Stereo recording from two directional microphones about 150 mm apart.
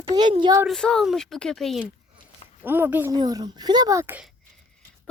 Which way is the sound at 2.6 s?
15° right (ahead or behind).